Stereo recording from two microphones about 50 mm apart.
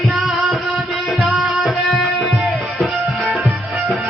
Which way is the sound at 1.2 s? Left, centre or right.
Centre.